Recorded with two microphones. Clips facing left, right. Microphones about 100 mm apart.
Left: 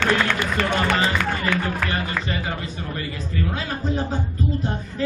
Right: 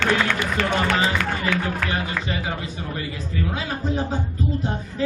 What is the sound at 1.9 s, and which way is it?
Speech, 10° right (ahead or behind).